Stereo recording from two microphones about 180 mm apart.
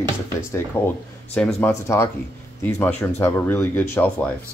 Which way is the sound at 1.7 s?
15° left (ahead or behind).